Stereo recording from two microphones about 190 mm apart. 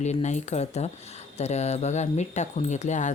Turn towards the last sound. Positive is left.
turn(degrees=40)  # may be behind; listen again after turning